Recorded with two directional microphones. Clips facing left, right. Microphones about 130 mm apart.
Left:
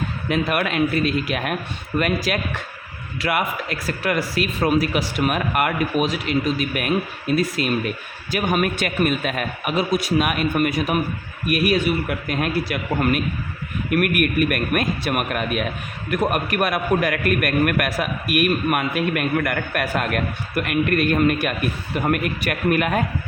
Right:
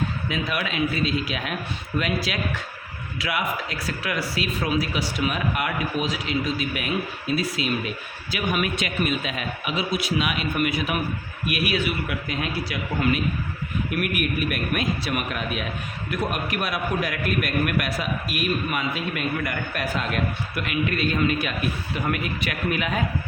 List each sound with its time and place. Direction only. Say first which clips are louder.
0.3 s speech: left 11 dB; 55° left (ahead or behind)